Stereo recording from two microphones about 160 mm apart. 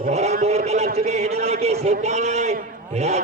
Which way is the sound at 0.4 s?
40° right (ahead or behind).